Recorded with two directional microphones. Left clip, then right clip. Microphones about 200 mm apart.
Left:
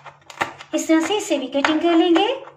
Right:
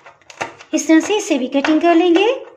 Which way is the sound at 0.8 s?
55° right (ahead or behind).